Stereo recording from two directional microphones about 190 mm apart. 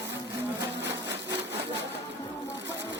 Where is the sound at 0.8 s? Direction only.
15° right (ahead or behind).